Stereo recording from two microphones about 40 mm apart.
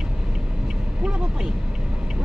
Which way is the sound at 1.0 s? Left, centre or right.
Right.